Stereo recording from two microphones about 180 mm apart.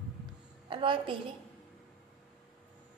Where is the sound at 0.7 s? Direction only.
25° right (ahead or behind).